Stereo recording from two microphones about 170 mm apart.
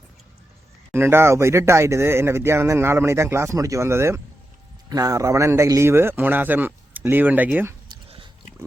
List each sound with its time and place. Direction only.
0.9 s speech: 15° right (ahead or behind)
7.9 s chewing: 30° right (ahead or behind)